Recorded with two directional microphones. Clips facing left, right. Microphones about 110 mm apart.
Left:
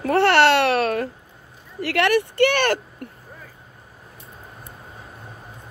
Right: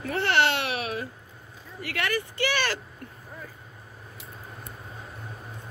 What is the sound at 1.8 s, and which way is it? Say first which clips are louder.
Speech: left 10 dB; 80° left.